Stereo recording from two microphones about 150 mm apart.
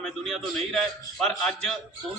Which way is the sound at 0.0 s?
5° left (ahead or behind).